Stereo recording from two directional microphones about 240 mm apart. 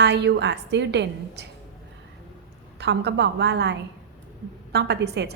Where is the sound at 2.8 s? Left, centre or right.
Right.